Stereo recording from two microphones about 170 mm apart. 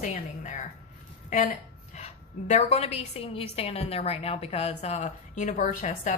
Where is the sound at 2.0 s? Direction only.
40° left (ahead or behind).